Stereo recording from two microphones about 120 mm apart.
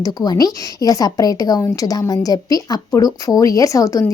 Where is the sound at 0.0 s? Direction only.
35° left (ahead or behind).